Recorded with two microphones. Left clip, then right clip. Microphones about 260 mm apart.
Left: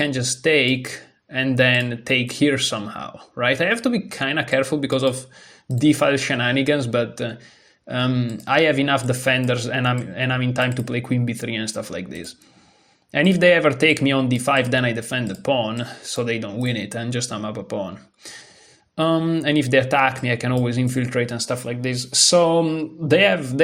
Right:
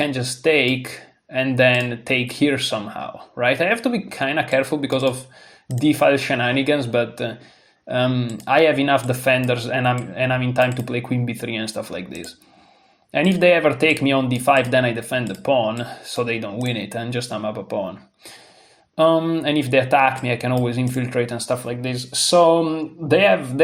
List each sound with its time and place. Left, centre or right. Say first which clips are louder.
0.0 s speech: right 1 dB; left
18.9 s speech: right 4 dB; left